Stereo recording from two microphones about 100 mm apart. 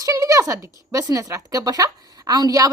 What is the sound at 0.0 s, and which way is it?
A woman's voice, 35° right (ahead or behind).